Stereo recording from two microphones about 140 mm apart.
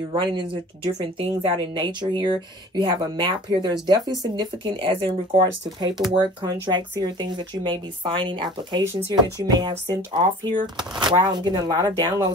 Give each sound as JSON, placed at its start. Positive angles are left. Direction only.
{"t": 0.2, "sound": "speech", "side_deg": -35}